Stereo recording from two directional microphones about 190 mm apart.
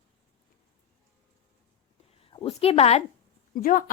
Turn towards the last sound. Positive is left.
turn(degrees=50)  # may be behind; listen again after turning